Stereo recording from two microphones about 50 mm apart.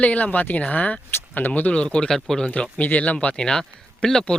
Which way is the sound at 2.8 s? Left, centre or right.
Left.